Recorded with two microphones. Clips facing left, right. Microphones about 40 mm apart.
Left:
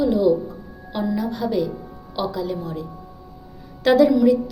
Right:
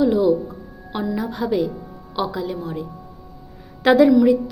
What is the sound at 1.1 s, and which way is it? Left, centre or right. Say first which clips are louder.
A woman's voice: right 1 dB; right.